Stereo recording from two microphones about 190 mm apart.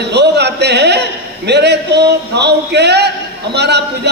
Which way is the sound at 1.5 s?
60° right (ahead or behind).